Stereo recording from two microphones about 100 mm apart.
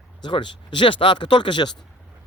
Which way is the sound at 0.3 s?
50° left (ahead or behind).